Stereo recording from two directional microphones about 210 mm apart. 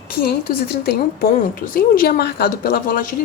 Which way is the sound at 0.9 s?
45° left (ahead or behind).